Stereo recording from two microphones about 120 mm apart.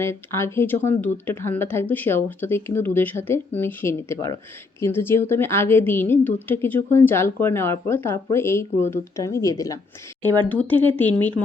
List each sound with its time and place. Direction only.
0.0 s a woman's voice: 20° left (ahead or behind)
10.5 s speech: 15° left (ahead or behind)